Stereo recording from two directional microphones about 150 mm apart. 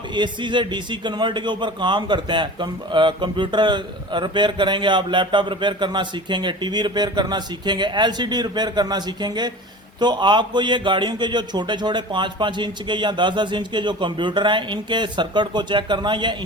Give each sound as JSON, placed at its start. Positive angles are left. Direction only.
{"t": 0.1, "sound": "a man's voice", "side_deg": -30}